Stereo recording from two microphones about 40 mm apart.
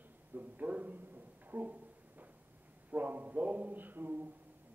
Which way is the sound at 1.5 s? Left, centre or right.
Right.